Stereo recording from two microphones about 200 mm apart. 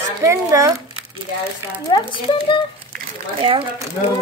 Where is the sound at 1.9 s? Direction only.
20° left (ahead or behind).